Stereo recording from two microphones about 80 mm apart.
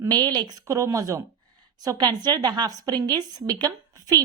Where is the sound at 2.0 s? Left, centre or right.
Right.